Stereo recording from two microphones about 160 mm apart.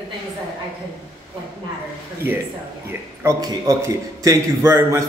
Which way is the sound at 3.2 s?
20° right (ahead or behind).